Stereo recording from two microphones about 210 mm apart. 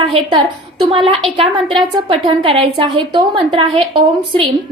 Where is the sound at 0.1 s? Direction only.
25° right (ahead or behind).